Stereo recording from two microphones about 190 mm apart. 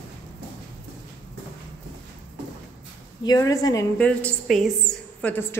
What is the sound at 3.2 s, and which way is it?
Speech, 20° left (ahead or behind).